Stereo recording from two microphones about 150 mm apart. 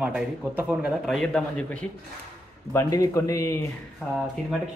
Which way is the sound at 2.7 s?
20° left (ahead or behind).